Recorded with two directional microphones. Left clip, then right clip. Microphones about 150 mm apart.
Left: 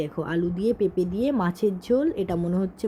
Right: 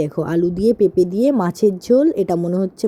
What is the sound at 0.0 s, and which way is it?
Speech, 45° right (ahead or behind).